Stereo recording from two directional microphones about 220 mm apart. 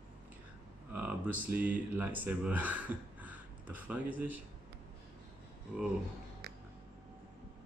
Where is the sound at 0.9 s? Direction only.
5° right (ahead or behind).